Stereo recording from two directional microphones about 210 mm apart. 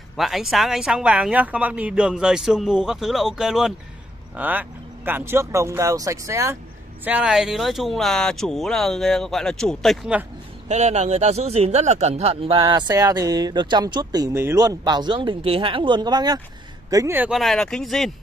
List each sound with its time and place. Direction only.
0.2 s speech: centre (ahead or behind)
10.7 s speech: 35° right (ahead or behind); by 18.1 s centre (ahead or behind)